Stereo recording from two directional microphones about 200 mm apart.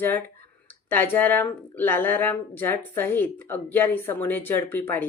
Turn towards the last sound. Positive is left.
turn(degrees=10)  # may be behind; listen again after turning